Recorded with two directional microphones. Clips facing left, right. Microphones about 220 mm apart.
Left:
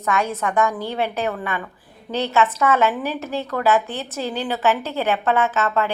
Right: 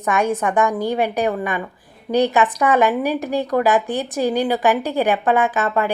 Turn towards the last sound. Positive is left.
turn(degrees=-15)  # may be behind; listen again after turning